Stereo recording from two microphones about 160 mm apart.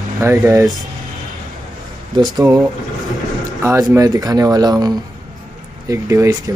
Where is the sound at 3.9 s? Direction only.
20° right (ahead or behind).